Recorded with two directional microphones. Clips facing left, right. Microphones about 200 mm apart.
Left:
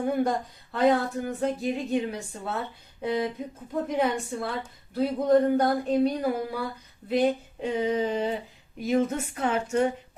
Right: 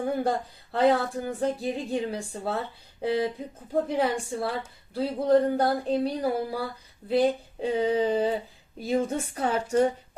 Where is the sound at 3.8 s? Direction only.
30° right (ahead or behind).